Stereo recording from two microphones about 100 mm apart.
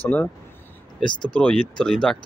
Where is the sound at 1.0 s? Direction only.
50° left (ahead or behind).